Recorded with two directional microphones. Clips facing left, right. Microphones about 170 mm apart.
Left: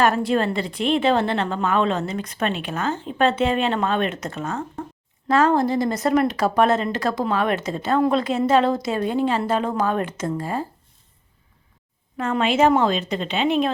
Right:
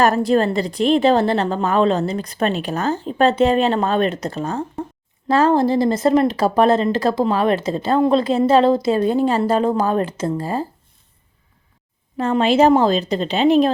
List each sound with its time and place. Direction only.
0.0 s a woman's voice: 40° right (ahead or behind)
12.1 s a woman's voice: 30° right (ahead or behind)